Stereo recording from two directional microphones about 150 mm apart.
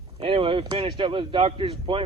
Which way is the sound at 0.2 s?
35° right (ahead or behind).